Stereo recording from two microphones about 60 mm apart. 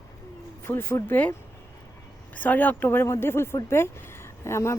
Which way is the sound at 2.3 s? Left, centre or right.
Left.